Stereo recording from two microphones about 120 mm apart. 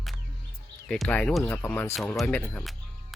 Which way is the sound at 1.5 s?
15° left (ahead or behind).